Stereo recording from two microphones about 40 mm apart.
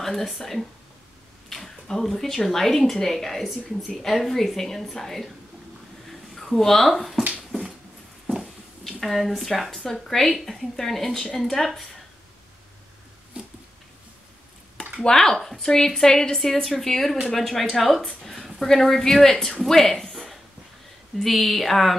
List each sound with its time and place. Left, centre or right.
0.0 s a woman's voice: centre
6.3 s speech: centre
8.8 s a woman's voice: centre
10.3 s a woman's voice: centre
13.4 s a sound: right
15.0 s a woman's voice: centre
21.2 s a woman's voice: centre